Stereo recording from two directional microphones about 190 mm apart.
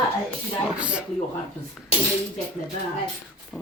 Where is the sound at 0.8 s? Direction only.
5° right (ahead or behind).